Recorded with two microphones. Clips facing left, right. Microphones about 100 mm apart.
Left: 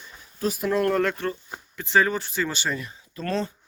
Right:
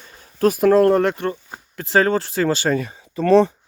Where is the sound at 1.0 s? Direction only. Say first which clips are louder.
Right 5 dB; 25° right (ahead or behind).